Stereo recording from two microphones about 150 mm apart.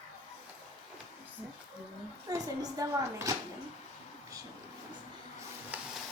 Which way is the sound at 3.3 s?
20° right (ahead or behind).